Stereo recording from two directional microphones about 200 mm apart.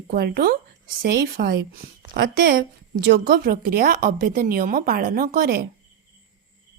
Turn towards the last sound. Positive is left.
turn(degrees=-50)  # may be behind; listen again after turning